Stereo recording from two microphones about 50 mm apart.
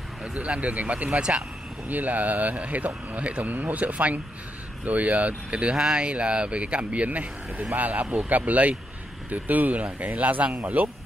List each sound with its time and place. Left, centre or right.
0.2 s speech: right